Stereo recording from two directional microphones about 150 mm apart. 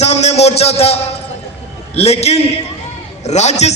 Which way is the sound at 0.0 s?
50° left (ahead or behind).